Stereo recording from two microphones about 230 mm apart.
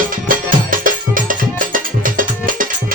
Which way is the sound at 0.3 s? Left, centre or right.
Right.